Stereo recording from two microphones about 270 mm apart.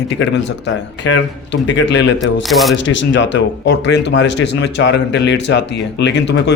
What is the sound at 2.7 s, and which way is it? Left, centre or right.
A man's voice, left.